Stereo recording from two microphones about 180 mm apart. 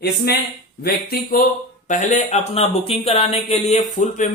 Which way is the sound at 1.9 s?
40° left (ahead or behind).